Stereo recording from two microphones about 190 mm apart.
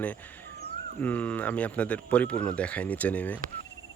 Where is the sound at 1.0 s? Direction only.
10° left (ahead or behind).